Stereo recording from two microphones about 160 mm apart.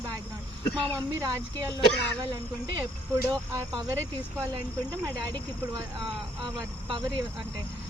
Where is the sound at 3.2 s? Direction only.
20° right (ahead or behind).